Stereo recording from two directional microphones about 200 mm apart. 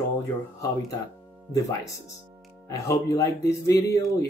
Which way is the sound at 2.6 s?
15° left (ahead or behind).